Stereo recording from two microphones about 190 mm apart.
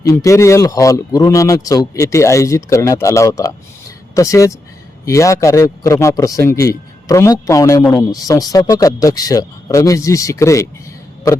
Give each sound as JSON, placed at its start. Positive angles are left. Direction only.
{"t": 0.0, "sound": "speech", "side_deg": 15}